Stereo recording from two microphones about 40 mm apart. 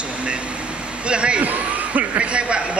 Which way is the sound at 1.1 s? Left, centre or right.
Right.